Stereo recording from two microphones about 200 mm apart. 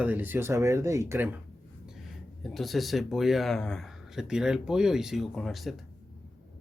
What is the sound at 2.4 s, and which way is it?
Speech, centre (ahead or behind).